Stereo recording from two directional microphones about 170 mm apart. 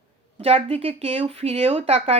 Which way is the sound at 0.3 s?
35° right (ahead or behind).